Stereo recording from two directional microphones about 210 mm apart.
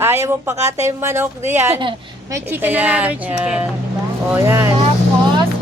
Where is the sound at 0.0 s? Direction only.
10° right (ahead or behind).